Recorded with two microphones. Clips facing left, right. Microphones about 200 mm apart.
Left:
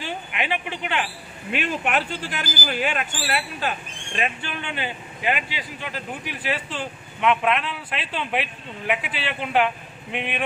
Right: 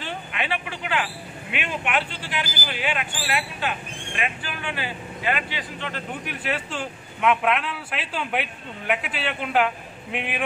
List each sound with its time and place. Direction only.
0.0 s a woman's voice: 15° left (ahead or behind)
1.5 s a man's voice: 40° left (ahead or behind); by 10.4 s 5° right (ahead or behind)